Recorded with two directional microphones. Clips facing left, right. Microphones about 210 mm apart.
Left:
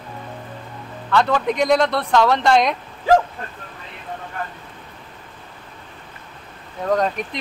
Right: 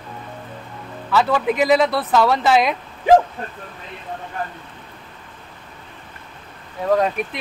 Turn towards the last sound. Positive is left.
turn(degrees=-5)  # may be behind; listen again after turning